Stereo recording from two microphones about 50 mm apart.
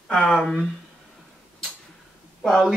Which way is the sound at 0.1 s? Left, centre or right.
Centre.